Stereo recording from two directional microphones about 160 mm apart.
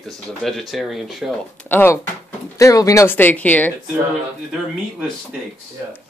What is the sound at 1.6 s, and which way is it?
Speech, 15° left (ahead or behind).